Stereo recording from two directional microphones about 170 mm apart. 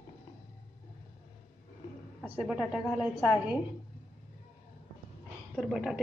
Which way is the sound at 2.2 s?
5° right (ahead or behind).